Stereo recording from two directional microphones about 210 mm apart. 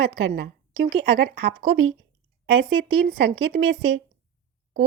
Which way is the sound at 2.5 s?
70° right (ahead or behind).